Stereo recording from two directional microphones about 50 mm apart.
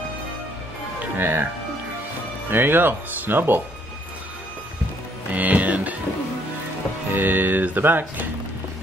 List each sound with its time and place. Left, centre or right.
1.1 s music: right
2.5 s speech: right
5.3 s music: right
7.2 s speech: right